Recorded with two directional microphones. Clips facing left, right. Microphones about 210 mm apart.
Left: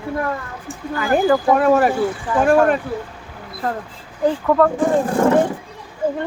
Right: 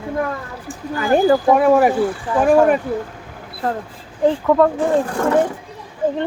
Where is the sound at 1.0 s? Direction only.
30° right (ahead or behind).